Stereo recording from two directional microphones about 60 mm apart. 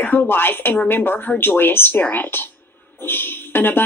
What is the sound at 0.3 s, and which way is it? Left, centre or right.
Speech, left.